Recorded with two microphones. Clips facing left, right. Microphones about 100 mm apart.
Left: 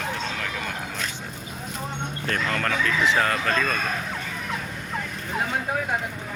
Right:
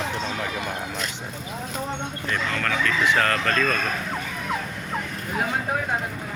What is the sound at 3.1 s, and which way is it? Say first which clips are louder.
Speech: right 1 dB; 10° left (ahead or behind).